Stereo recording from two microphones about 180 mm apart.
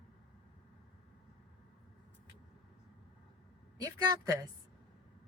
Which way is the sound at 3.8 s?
20° right (ahead or behind).